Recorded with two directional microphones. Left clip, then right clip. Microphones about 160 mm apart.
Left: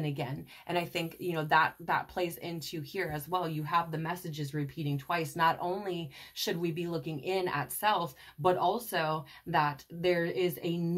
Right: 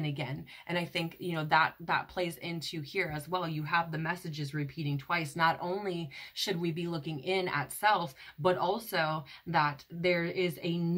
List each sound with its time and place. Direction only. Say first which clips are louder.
0.0 s speech: left 1 dB; 35° left (ahead or behind)